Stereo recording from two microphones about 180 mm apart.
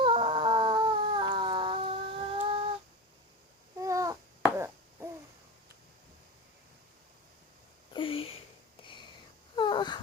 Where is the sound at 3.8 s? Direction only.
20° right (ahead or behind).